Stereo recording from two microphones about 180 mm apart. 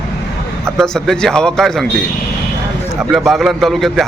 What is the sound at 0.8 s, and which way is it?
A man's voice, 5° left (ahead or behind).